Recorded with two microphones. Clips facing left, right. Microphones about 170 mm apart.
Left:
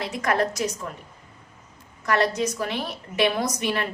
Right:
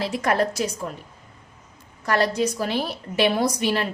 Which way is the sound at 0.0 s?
30° right (ahead or behind).